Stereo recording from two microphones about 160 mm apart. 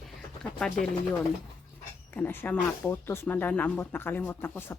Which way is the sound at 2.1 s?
15° left (ahead or behind).